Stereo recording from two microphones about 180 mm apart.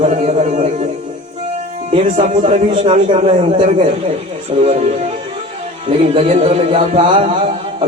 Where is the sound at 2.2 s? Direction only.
45° right (ahead or behind).